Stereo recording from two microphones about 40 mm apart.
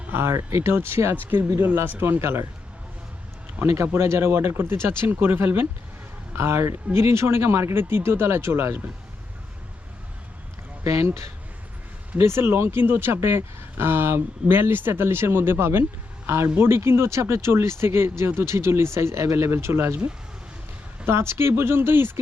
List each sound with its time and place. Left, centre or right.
0.1 s speech: right
1.7 s speech: right
3.9 s speech: right
6.3 s speech: right
12.1 s speech: right
21.1 s speech: right